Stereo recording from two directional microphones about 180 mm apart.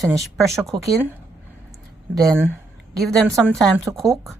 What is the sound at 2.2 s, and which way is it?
Speech, 15° right (ahead or behind).